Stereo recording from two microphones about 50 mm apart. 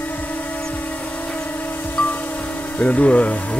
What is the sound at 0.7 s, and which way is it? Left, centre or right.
Music, left.